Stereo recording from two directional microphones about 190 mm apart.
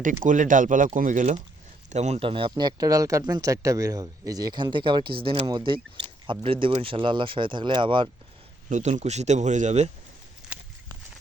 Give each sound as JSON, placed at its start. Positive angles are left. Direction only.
{"t": 0.3, "sound": "speech", "side_deg": -45}
{"t": 8.7, "sound": "speech", "side_deg": -40}